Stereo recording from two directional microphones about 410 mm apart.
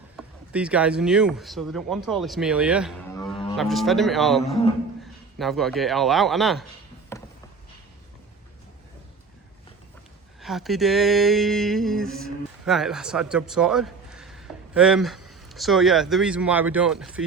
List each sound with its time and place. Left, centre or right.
0.2 s speech: centre
10.4 s a sound: centre
15.3 s speech: centre